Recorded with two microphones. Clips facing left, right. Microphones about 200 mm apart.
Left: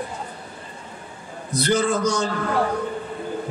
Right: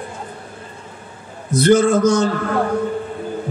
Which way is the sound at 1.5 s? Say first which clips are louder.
Right 8 dB; 50° right (ahead or behind).